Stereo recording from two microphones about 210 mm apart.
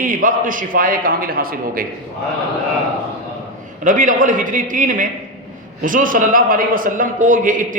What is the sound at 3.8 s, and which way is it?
A man's voice, 40° right (ahead or behind).